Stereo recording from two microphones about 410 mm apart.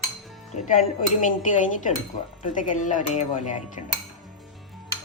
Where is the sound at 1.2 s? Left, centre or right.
Centre.